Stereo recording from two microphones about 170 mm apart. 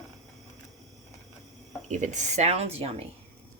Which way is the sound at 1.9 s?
45° right (ahead or behind).